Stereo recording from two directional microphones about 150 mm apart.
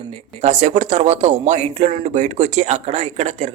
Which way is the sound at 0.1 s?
45° right (ahead or behind).